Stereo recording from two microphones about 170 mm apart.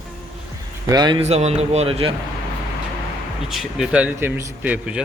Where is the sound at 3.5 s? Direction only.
Centre (ahead or behind).